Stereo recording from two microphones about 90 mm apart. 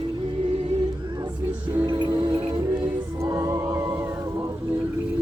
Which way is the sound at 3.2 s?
35° right (ahead or behind).